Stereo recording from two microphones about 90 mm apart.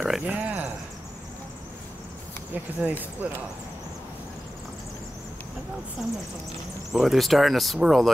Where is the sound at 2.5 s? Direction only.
20° right (ahead or behind).